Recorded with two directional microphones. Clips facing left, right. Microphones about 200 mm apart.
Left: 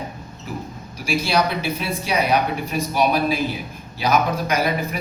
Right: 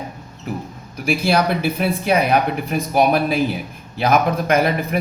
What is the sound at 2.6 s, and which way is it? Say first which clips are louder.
Speech: right 4 dB; 55° right (ahead or behind).